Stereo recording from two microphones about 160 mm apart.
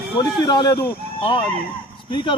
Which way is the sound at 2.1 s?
30° left (ahead or behind).